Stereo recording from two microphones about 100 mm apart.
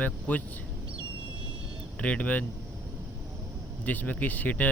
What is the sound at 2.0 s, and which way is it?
Speech, 15° left (ahead or behind).